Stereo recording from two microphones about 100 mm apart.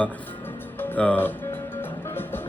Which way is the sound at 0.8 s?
15° left (ahead or behind).